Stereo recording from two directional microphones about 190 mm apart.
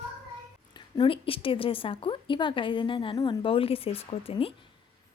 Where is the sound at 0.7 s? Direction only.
25° left (ahead or behind).